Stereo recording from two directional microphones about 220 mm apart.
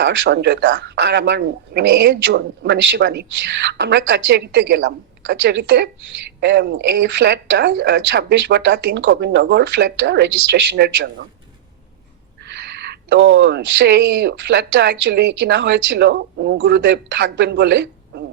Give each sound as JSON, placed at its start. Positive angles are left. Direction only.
{"t": 0.0, "sound": "speech", "side_deg": -50}
{"t": 12.5, "sound": "speech", "side_deg": -50}